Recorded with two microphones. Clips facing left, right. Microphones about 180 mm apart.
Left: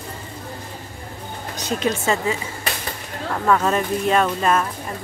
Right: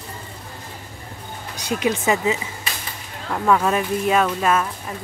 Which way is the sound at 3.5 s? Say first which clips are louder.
Even; 5° right (ahead or behind).